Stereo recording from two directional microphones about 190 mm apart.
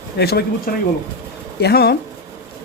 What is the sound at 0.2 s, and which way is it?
Speech, 55° left (ahead or behind).